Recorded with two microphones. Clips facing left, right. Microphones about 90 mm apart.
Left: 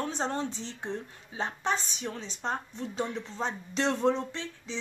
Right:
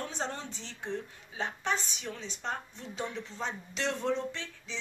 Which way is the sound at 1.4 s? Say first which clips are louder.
Left 2 dB; 35° left (ahead or behind).